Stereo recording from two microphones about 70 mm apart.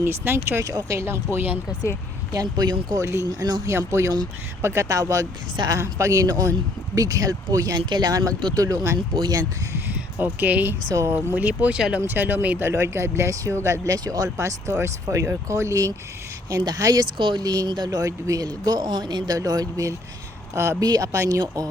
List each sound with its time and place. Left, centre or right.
0.0 s speech: right
2.3 s speech: right
3.0 s speech: right
8.4 s speech: right
9.1 s speech: right
9.9 s speech: right
12.0 s speech: right
12.6 s speech: right
13.8 s speech: right
14.3 s speech: right
16.6 s speech: right
19.4 s speech: right
20.6 s speech: right
20.8 s speech: right